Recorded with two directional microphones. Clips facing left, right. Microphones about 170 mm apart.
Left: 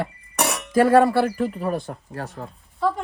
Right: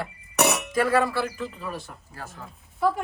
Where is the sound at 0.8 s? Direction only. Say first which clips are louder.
Left 7 dB; 50° left (ahead or behind).